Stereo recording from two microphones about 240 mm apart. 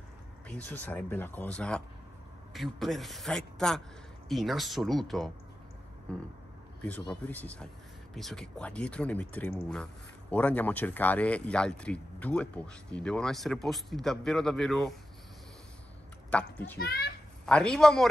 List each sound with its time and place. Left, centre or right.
0.5 s speech: centre
6.8 s speech: centre
16.3 s a child's voice: centre
16.7 s a child's voice: left
17.5 s speech: centre